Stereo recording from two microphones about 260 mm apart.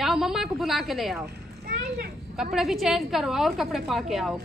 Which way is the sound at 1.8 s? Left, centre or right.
Right.